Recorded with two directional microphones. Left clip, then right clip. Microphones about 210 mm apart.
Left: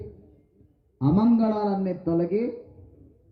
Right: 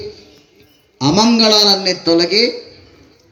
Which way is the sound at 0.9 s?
30° left (ahead or behind).